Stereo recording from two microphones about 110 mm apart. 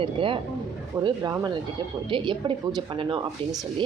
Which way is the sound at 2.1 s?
50° right (ahead or behind).